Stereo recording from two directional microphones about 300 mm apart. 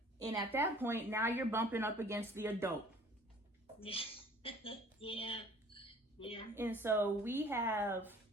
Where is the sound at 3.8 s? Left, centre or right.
Centre.